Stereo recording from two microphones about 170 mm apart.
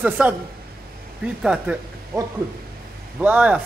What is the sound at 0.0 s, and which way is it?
A man's voice, 10° right (ahead or behind).